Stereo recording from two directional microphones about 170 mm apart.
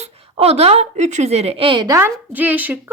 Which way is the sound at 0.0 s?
35° right (ahead or behind).